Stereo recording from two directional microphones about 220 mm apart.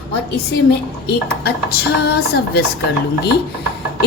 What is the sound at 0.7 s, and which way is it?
A woman's voice, 45° left (ahead or behind).